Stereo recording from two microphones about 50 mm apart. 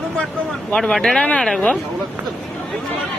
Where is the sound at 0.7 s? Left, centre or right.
Centre.